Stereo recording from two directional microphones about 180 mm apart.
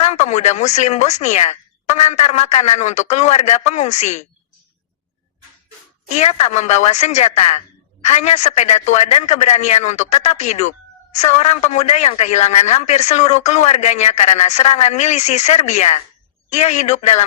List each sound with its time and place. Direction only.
0.0 s speech: 40° left (ahead or behind)
6.1 s speech: 40° left (ahead or behind)